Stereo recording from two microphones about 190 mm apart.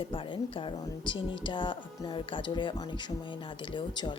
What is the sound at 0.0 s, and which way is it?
Speech, 30° left (ahead or behind).